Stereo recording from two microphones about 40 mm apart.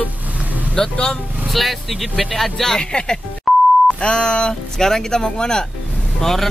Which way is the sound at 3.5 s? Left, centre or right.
Centre.